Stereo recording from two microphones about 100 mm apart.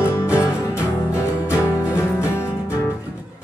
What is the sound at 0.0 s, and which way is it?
Music, 25° left (ahead or behind).